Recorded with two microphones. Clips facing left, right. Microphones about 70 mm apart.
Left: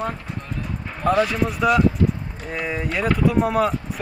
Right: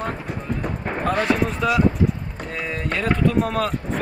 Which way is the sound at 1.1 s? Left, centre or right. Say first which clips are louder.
Left 1 dB; right.